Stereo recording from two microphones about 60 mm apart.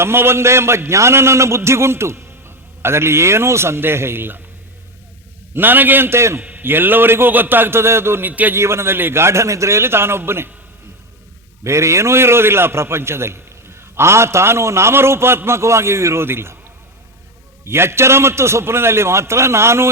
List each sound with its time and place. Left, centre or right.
0.0 s a man's voice: right
5.5 s a man's voice: right
6.6 s a man's voice: right
8.3 s a man's voice: right
8.5 s a man's voice: right
11.6 s a man's voice: right
17.7 s a man's voice: right